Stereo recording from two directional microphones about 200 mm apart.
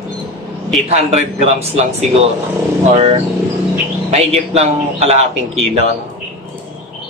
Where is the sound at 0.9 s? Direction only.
30° right (ahead or behind).